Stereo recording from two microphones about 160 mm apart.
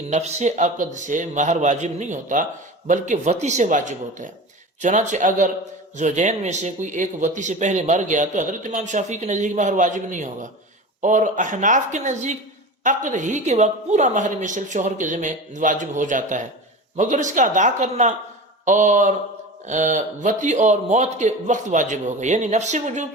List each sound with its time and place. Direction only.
0.1 s speech: 45° right (ahead or behind)